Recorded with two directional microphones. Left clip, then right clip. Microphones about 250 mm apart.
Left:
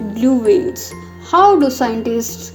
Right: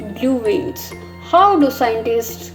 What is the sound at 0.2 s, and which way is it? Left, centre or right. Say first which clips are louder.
Speech: left 4 dB; left.